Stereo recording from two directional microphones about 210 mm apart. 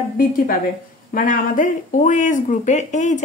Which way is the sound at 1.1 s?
40° left (ahead or behind).